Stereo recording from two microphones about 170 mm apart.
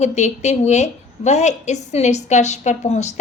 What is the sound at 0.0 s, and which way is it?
A woman's voice, 40° left (ahead or behind).